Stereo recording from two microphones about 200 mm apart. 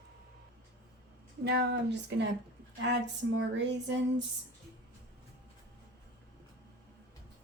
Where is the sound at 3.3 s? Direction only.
65° right (ahead or behind).